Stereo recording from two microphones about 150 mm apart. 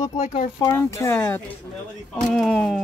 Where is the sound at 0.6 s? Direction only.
20° left (ahead or behind).